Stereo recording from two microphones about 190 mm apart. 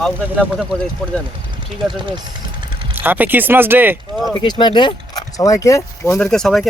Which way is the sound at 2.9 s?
10° right (ahead or behind).